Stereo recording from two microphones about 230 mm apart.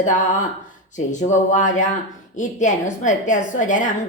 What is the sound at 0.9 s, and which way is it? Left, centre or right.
A woman's voice, left.